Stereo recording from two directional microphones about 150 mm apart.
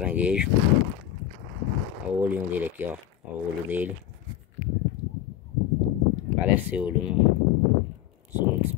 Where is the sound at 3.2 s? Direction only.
10° right (ahead or behind).